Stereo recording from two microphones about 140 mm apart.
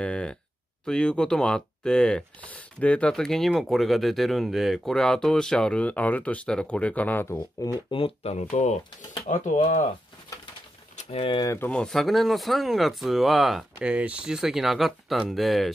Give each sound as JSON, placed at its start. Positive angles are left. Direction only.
{"t": 0.0, "sound": "a sound", "side_deg": 5}
{"t": 0.8, "sound": "speech", "side_deg": 5}
{"t": 7.9, "sound": "speech", "side_deg": 45}
{"t": 11.0, "sound": "speech", "side_deg": 40}
{"t": 11.4, "sound": "speech", "side_deg": 15}